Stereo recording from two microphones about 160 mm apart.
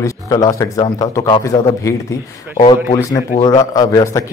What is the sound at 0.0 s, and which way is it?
Speech, 20° left (ahead or behind).